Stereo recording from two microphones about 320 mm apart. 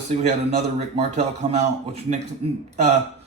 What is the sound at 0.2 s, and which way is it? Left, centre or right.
A man's voice, right.